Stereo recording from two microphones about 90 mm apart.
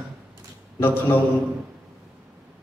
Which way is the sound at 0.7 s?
25° left (ahead or behind).